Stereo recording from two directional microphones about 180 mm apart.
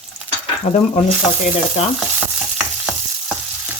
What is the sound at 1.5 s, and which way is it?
Frying, 35° left (ahead or behind).